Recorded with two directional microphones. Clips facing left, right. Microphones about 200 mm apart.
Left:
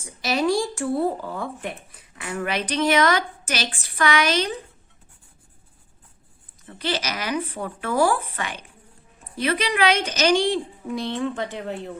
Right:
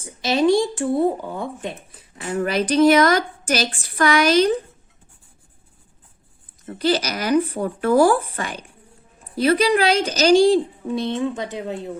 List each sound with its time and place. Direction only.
0.0 s speech: 25° right (ahead or behind)
2.1 s a woman's voice: 35° right (ahead or behind)
6.7 s a woman's voice: 40° right (ahead or behind)
10.9 s speech: 25° right (ahead or behind)